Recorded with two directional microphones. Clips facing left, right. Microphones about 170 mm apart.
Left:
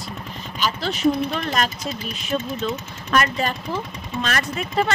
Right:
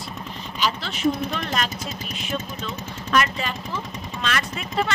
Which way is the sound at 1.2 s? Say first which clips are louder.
Left 3 dB; 45° right (ahead or behind).